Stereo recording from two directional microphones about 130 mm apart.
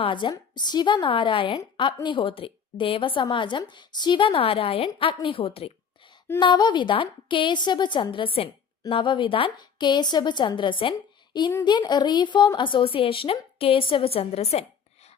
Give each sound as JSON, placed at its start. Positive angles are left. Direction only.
{"t": 0.0, "sound": "a woman's voice", "side_deg": 40}
{"t": 6.4, "sound": "a woman's voice", "side_deg": 35}